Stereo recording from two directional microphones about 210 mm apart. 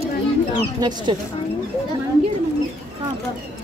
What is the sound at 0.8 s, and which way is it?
Speech, 20° right (ahead or behind).